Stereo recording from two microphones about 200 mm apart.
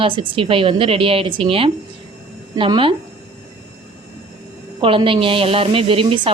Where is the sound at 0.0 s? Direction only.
25° right (ahead or behind).